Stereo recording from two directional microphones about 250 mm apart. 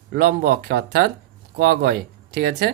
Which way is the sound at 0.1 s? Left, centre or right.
Right.